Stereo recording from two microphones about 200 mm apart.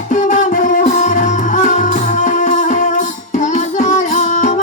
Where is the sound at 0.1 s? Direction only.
40° left (ahead or behind).